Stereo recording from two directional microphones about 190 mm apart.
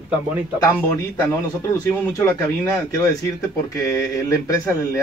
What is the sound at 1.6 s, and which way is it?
A man's voice, 15° left (ahead or behind).